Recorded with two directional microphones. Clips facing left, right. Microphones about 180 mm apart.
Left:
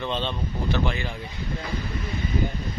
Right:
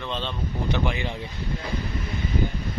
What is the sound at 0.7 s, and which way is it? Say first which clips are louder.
Speech: even; 15° right (ahead or behind).